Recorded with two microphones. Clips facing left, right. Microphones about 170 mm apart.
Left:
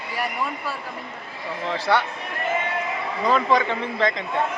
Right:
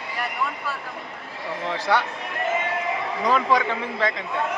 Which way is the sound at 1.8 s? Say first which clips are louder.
Left 1 dB; 15° right (ahead or behind).